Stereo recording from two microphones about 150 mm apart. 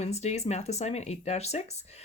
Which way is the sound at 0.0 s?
45° left (ahead or behind).